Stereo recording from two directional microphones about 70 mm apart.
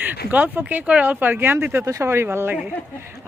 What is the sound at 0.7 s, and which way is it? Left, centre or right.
Speech, right.